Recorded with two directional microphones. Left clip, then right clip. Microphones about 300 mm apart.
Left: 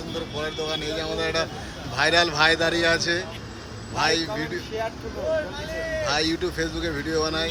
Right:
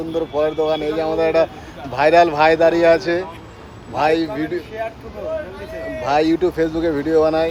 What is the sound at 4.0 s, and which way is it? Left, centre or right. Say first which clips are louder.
Speech: right 6 dB; centre.